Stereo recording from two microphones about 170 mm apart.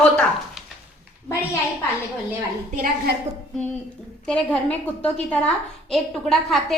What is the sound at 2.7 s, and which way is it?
Speech, 55° right (ahead or behind).